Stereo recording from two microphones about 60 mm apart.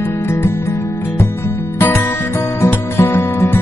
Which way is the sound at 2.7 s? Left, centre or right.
Left.